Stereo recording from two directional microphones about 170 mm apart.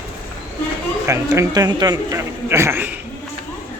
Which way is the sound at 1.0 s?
15° right (ahead or behind).